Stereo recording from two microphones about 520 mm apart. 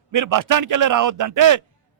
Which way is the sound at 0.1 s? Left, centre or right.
Right.